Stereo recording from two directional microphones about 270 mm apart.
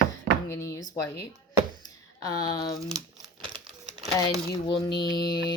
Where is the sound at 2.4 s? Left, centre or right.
Centre.